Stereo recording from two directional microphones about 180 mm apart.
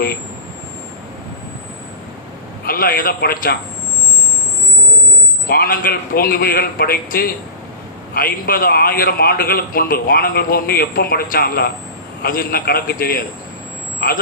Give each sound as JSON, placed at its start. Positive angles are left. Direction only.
{"t": 2.6, "sound": "a man's voice", "side_deg": 55}
{"t": 5.5, "sound": "a man's voice", "side_deg": 55}